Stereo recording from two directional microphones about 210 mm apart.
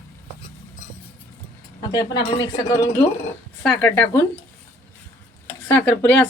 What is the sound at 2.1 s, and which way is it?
Speech, 20° left (ahead or behind).